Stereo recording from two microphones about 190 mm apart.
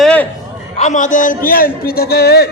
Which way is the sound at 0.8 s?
40° left (ahead or behind).